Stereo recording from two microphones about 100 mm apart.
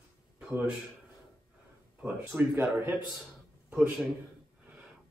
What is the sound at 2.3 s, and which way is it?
Speech, 20° right (ahead or behind).